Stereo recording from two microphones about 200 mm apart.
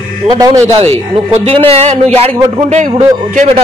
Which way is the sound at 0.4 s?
15° right (ahead or behind).